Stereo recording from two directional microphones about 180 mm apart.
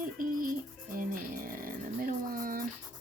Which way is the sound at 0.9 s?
50° right (ahead or behind).